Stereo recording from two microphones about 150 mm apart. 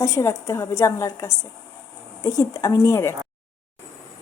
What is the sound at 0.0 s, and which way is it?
A woman's voice, 20° left (ahead or behind).